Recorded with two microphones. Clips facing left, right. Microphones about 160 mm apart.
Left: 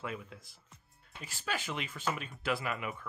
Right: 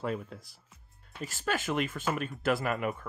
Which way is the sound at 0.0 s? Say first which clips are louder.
Right 7 dB; 40° right (ahead or behind).